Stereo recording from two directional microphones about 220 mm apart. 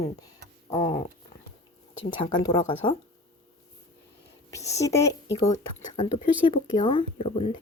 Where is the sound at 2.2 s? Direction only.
20° left (ahead or behind).